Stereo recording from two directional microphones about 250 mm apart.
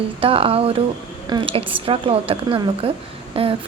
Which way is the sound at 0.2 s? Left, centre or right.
Right.